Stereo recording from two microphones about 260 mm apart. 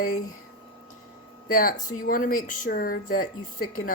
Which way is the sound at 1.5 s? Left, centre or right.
Left.